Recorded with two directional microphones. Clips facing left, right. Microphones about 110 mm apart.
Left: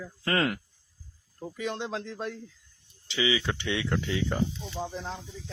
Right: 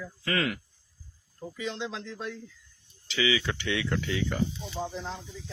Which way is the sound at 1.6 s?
50° left (ahead or behind).